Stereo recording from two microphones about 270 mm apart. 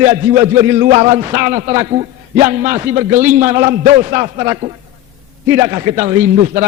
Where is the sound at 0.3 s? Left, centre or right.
Centre.